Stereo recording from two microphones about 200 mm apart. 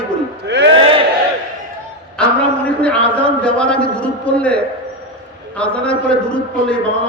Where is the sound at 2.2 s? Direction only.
5° left (ahead or behind).